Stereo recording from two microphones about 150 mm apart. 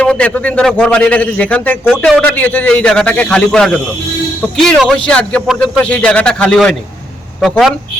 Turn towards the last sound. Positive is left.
turn(degrees=0)  # may be behind; listen again after turning